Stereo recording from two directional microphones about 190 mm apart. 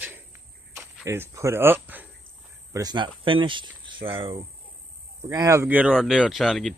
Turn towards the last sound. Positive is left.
turn(degrees=0)  # may be behind; listen again after turning